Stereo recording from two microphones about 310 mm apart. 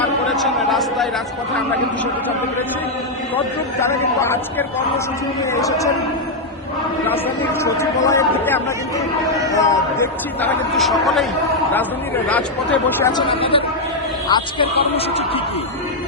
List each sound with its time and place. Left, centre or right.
0.3 s a sound: centre
3.3 s a man's voice: centre
7.6 s a man's voice: centre
12.3 s a man's voice: centre